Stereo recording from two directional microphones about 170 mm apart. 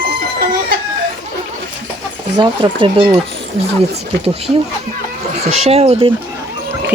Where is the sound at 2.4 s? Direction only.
30° right (ahead or behind).